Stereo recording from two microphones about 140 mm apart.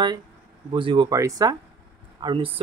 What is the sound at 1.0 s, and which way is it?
Speech, 25° right (ahead or behind).